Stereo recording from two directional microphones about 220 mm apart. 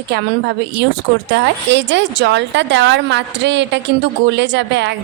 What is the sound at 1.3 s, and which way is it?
A woman's voice, 55° right (ahead or behind).